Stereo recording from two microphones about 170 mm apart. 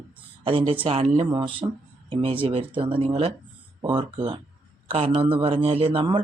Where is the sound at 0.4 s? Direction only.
30° right (ahead or behind).